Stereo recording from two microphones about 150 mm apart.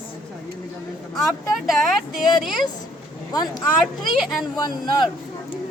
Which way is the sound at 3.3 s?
25° left (ahead or behind).